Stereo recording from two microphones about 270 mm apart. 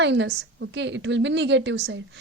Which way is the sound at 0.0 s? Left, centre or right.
Right.